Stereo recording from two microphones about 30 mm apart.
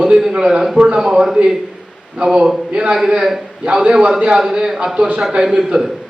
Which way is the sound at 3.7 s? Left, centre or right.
Right.